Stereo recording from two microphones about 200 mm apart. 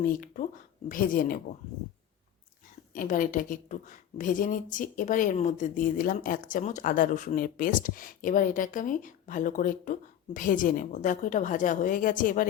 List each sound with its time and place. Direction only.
0.0 s speech: 45° left (ahead or behind)
2.9 s speech: 45° left (ahead or behind)